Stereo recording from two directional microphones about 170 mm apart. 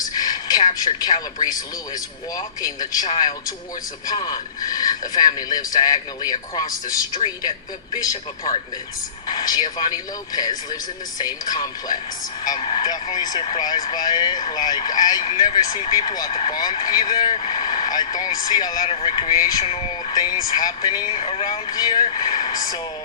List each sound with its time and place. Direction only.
0.0 s speech: 25° left (ahead or behind)
19.6 s speech: 35° left (ahead or behind)